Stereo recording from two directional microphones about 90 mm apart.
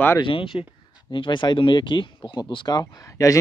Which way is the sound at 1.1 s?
65° left (ahead or behind).